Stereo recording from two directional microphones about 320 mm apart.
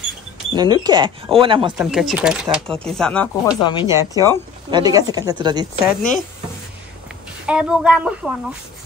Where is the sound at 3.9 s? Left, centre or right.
Centre.